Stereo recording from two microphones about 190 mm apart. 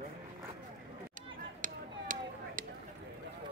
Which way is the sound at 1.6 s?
45° right (ahead or behind).